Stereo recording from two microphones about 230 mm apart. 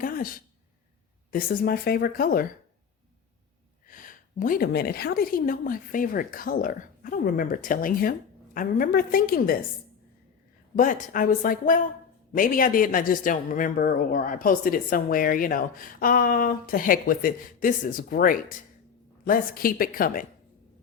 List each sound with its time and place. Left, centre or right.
0.0 s a man's voice: left
3.8 s a man's voice: left
10.8 s a man's voice: left